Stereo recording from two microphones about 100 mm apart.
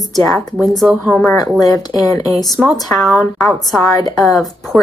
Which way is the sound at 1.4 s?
40° left (ahead or behind).